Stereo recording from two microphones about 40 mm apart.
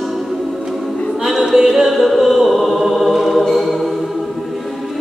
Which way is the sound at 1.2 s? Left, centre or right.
Centre.